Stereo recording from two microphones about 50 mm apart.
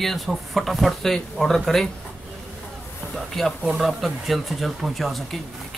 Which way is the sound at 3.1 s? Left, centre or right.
Centre.